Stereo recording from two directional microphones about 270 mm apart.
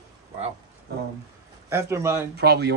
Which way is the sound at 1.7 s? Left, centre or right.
Centre.